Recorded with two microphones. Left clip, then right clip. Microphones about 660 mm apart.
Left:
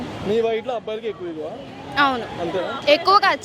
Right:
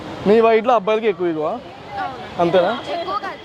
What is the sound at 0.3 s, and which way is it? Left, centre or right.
Speech, right.